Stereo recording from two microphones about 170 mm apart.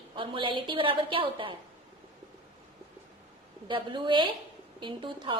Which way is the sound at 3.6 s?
30° right (ahead or behind).